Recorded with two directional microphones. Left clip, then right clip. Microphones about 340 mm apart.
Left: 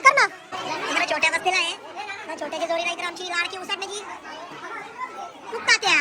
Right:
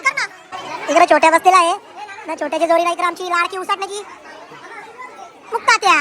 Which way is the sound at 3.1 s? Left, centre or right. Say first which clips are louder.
Right 8 dB; centre.